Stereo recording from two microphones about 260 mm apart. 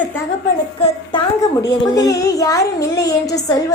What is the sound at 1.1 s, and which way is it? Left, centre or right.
Music, centre.